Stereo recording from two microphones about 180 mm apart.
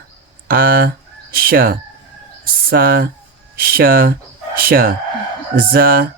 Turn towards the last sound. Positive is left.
turn(degrees=-55)  # may be behind; listen again after turning